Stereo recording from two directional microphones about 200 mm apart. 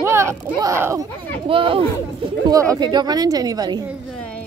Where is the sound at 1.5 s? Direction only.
25° right (ahead or behind).